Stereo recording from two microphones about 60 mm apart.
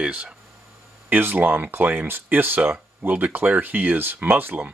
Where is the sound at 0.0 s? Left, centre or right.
Centre.